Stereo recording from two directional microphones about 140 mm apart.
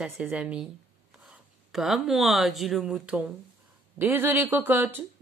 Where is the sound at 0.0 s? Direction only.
10° right (ahead or behind).